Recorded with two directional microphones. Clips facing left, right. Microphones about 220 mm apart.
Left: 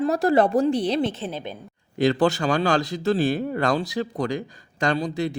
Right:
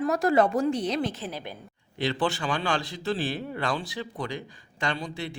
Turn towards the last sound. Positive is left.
turn(degrees=40)  # may be behind; listen again after turning